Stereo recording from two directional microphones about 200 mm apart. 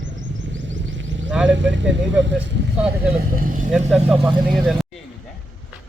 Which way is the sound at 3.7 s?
5° right (ahead or behind).